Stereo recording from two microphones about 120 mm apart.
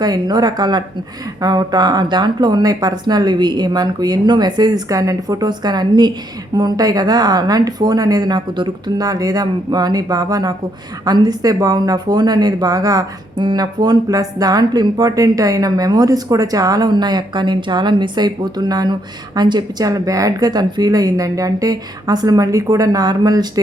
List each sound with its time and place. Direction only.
0.0 s speech: 35° right (ahead or behind)